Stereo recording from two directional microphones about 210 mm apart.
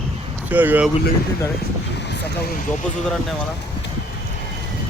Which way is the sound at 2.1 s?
50° left (ahead or behind).